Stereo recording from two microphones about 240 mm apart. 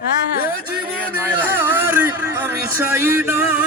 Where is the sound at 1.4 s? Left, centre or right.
Centre.